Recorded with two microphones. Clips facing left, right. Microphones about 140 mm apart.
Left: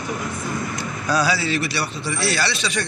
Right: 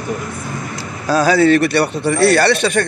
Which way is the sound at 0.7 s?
40° right (ahead or behind).